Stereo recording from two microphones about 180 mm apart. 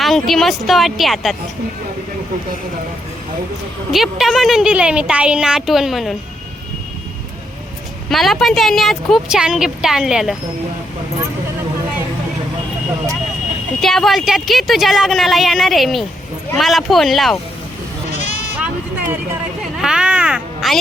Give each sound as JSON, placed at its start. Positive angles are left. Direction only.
{"t": 0.0, "sound": "a woman's voice", "side_deg": 0}
{"t": 3.9, "sound": "a woman's voice", "side_deg": 0}
{"t": 8.1, "sound": "a woman's voice", "side_deg": 0}
{"t": 13.8, "sound": "a woman's voice", "side_deg": 0}
{"t": 18.2, "sound": "sheep", "side_deg": 40}
{"t": 18.6, "sound": "vehicle", "side_deg": -10}
{"t": 19.7, "sound": "a sound", "side_deg": -5}